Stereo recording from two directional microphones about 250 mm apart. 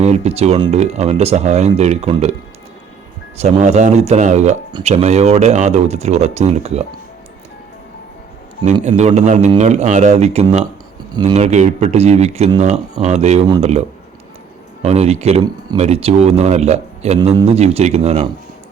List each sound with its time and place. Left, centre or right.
0.0 s speech: right
3.3 s speech: right
8.6 s speech: right